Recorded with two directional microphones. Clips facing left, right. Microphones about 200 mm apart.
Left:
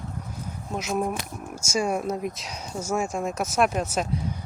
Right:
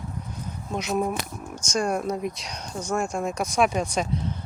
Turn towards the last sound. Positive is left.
turn(degrees=10)  # may be behind; listen again after turning